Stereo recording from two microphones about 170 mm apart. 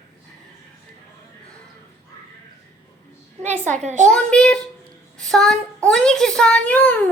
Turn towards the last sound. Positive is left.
turn(degrees=10)  # may be behind; listen again after turning